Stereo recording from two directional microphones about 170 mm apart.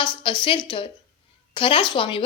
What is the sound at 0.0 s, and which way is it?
A woman's voice, 30° left (ahead or behind).